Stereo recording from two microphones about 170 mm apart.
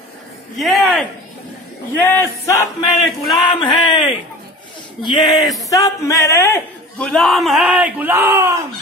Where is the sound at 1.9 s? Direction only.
15° left (ahead or behind).